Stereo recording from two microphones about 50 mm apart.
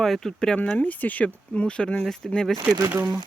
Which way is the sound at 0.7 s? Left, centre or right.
Left.